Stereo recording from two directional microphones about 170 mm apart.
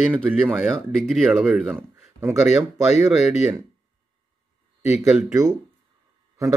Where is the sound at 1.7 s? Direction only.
15° right (ahead or behind).